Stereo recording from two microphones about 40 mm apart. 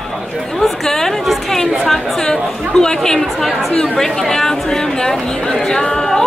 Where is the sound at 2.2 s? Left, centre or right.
Centre.